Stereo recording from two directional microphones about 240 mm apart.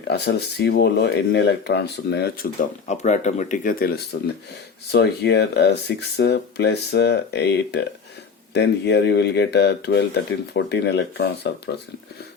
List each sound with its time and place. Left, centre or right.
0.1 s speech: left